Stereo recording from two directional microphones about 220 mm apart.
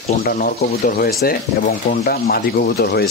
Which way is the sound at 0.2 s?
40° left (ahead or behind).